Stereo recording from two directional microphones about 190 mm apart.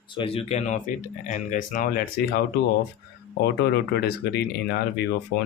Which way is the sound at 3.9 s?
60° left (ahead or behind).